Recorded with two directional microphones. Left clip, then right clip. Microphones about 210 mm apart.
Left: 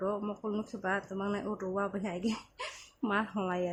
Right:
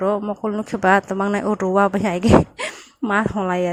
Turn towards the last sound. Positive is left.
turn(degrees=-40)  # may be behind; listen again after turning